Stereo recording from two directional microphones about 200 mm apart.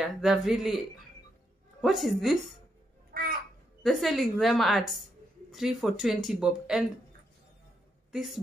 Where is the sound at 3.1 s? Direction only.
50° right (ahead or behind).